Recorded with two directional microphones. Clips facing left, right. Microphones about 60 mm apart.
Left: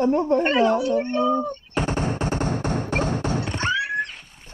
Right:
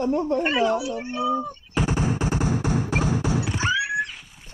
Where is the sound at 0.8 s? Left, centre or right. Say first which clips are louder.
Left 5 dB; centre.